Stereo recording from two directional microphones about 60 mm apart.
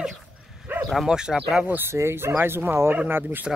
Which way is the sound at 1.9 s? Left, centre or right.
Right.